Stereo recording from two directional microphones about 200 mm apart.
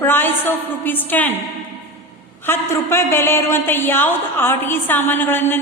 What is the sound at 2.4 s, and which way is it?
A woman's voice, 10° left (ahead or behind).